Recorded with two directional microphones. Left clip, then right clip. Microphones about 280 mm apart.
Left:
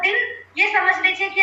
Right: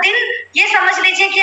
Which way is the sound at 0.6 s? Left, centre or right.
Right.